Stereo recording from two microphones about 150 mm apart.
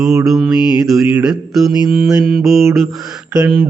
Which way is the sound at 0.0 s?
20° right (ahead or behind).